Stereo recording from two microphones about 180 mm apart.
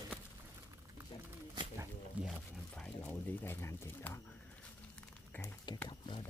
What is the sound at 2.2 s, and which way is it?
Music, 10° right (ahead or behind).